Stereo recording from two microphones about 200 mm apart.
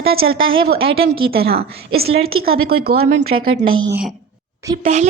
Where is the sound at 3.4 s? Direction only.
85° right.